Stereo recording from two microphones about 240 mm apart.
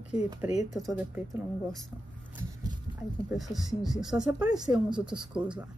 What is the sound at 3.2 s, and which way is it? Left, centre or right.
Speech, centre.